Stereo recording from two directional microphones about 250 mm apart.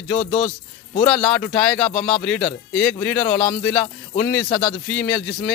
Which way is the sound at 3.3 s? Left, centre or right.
Left.